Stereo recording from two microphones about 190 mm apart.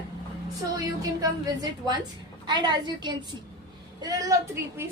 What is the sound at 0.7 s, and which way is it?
A woman's voice, 20° right (ahead or behind).